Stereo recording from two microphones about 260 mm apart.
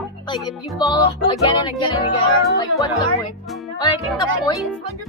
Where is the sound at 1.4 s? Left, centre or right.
Centre.